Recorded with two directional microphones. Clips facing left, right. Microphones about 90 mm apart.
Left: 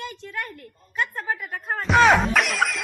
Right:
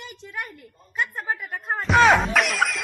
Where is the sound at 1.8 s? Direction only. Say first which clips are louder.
Even; centre (ahead or behind).